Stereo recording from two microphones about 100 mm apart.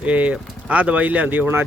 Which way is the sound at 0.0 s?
15° right (ahead or behind).